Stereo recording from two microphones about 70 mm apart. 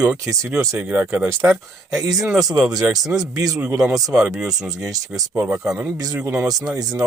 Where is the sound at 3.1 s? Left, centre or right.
Right.